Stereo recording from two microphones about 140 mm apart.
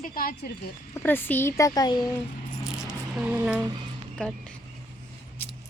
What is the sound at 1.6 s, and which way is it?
Speech, 30° left (ahead or behind).